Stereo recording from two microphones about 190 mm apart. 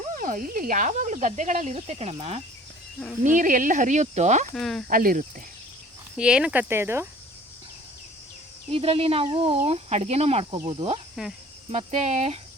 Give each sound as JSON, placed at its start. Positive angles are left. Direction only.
{"t": 0.1, "sound": "speech", "side_deg": -45}
{"t": 4.5, "sound": "speech", "side_deg": 0}
{"t": 4.9, "sound": "speech", "side_deg": -45}
{"t": 6.1, "sound": "cricket", "side_deg": -5}
{"t": 8.7, "sound": "speech", "side_deg": -30}